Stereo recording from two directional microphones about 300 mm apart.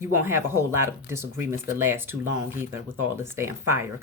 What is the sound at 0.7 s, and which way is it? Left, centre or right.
Speech, centre.